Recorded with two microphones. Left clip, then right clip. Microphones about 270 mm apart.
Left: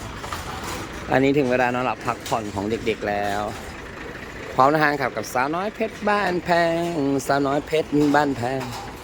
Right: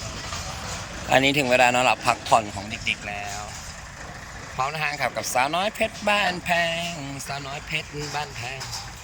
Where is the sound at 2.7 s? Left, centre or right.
Left.